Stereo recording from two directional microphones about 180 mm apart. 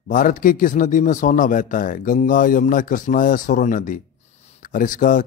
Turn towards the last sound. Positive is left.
turn(degrees=45)  # may be behind; listen again after turning